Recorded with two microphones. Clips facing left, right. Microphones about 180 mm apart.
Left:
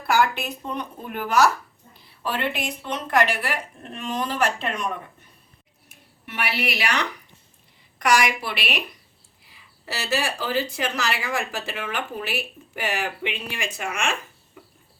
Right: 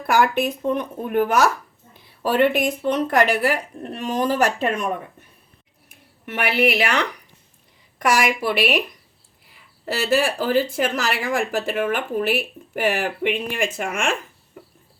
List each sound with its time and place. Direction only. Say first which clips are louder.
0.1 s speech: right 3 dB; 55° right (ahead or behind)
6.2 s speech: right 8 dB; 50° right (ahead or behind)
8.2 s speech: right 6 dB; 45° right (ahead or behind)
9.8 s speech: right 7 dB; 55° right (ahead or behind)